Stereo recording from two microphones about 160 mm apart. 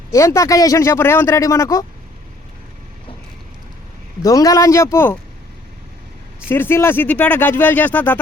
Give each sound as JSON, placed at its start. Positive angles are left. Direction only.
{"t": 0.1, "sound": "a man's voice", "side_deg": 20}
{"t": 4.2, "sound": "a man's voice", "side_deg": 20}
{"t": 6.5, "sound": "speech", "side_deg": 15}